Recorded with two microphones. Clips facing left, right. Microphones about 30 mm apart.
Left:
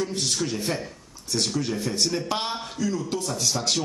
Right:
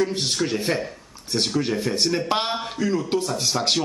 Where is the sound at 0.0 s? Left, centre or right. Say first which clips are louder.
Right 4 dB; right.